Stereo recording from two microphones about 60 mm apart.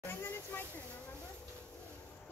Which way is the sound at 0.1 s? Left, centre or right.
Left.